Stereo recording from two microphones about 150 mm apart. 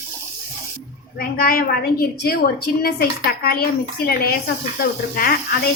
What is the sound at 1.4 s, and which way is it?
A woman's voice, 75° left (ahead or behind).